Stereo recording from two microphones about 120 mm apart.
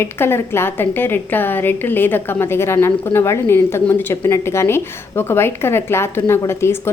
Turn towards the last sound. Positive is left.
turn(degrees=20)  # may be behind; listen again after turning